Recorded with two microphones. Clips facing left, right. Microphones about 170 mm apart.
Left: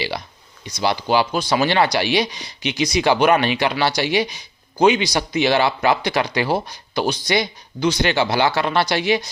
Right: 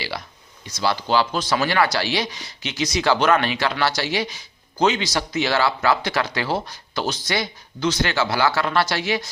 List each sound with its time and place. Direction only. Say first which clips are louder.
0.6 s speech: left 2 dB; 15° left (ahead or behind)